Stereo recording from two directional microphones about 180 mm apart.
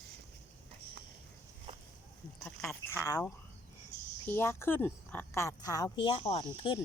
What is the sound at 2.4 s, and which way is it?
Speech, 5° left (ahead or behind).